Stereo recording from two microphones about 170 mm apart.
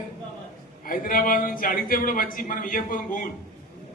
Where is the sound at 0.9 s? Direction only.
55° left (ahead or behind).